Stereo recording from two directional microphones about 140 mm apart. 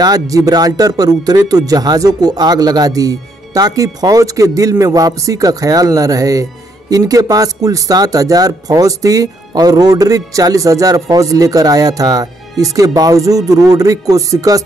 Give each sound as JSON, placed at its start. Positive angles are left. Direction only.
{"t": 0.0, "sound": "a man's voice", "side_deg": -25}